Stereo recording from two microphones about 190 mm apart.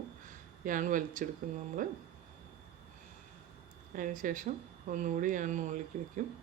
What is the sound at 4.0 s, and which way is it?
A woman's voice, 45° right (ahead or behind).